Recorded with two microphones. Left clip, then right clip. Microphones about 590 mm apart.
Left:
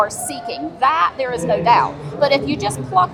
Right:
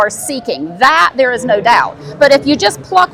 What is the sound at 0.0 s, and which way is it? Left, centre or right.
A woman's voice, right.